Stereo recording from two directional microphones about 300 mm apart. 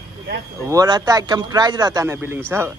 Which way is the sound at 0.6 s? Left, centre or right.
Centre.